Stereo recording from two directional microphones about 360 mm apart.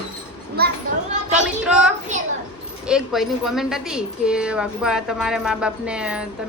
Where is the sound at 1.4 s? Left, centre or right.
Centre.